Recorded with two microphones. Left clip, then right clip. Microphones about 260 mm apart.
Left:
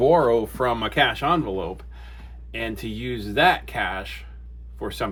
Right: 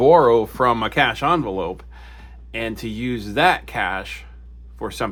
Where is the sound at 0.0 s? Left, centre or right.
Right.